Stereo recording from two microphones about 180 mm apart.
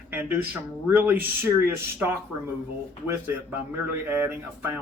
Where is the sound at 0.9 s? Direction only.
10° right (ahead or behind).